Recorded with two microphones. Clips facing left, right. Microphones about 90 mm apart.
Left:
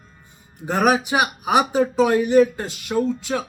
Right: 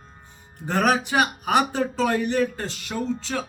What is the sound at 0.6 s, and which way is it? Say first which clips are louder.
Speech: left 3 dB; 10° left (ahead or behind).